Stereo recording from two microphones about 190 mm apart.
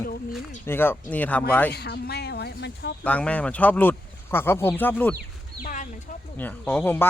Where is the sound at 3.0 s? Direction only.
5° left (ahead or behind).